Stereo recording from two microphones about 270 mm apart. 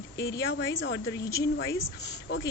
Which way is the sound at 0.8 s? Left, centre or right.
Left.